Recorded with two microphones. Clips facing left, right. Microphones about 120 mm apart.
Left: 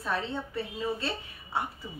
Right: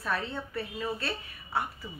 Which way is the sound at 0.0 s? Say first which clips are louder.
Left 1 dB; 20° left (ahead or behind).